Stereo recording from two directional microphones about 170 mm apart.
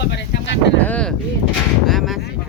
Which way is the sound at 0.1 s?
90° left.